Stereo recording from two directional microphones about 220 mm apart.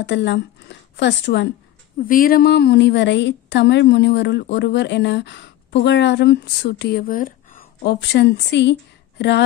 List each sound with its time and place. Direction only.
0.0 s a woman's voice: 55° left (ahead or behind)
2.0 s a woman's voice: 40° left (ahead or behind)
7.8 s a woman's voice: 50° left (ahead or behind)